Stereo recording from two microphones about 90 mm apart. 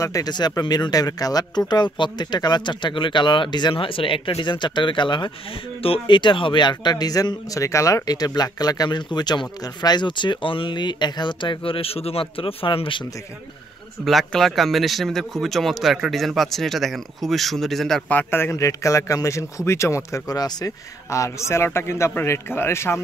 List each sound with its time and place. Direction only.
0.0 s a man's voice: 40° left (ahead or behind); by 5.3 s 60° left (ahead or behind)
5.8 s a man's voice: 75° left (ahead or behind)
14.0 s speech: centre (ahead or behind)
18.0 s a man's voice: 20° left (ahead or behind)